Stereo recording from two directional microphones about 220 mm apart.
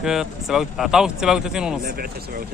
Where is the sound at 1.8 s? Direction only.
40° right (ahead or behind).